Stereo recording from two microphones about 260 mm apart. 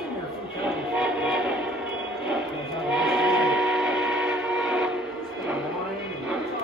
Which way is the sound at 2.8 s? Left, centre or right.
Centre.